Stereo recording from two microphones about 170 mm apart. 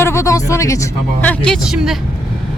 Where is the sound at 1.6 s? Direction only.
5° right (ahead or behind).